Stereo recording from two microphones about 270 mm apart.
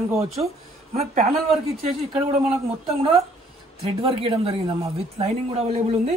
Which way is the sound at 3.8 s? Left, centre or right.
Centre.